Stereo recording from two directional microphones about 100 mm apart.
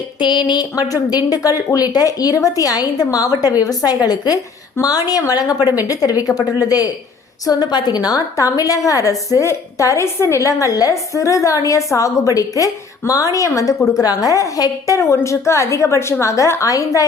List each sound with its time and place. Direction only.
0.2 s a woman's voice: 50° left (ahead or behind); by 17.1 s 35° left (ahead or behind)